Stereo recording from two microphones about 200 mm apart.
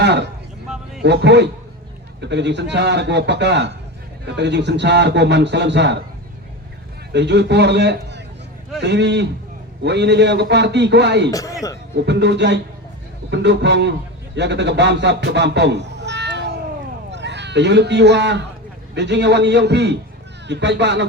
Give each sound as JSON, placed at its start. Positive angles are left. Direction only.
{"t": 0.0, "sound": "a sound", "side_deg": -60}
{"t": 1.0, "sound": "a man's voice", "side_deg": -60}
{"t": 7.1, "sound": "a man's voice", "side_deg": -60}
{"t": 11.3, "sound": "a man's voice", "side_deg": 15}
{"t": 11.9, "sound": "a man's voice", "side_deg": -60}